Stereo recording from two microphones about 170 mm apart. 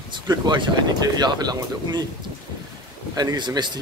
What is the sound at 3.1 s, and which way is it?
Speech, 25° right (ahead or behind).